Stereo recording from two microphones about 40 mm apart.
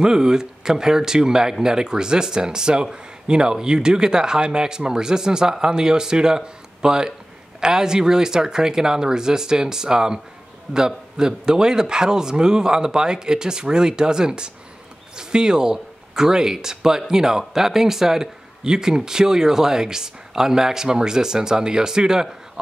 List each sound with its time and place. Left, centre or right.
0.0 s speech: centre